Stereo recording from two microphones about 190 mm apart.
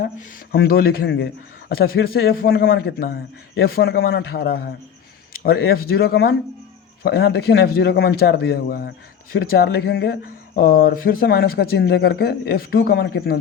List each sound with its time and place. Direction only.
0.0 s a man's voice: 50° left (ahead or behind)